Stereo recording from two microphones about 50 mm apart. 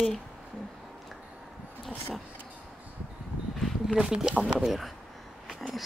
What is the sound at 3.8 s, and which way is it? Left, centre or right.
Speech, centre.